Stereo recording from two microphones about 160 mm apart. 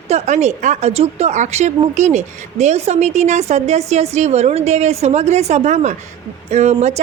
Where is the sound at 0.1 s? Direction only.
45° right (ahead or behind).